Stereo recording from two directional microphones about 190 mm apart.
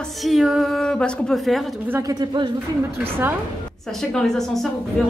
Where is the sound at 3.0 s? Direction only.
10° right (ahead or behind).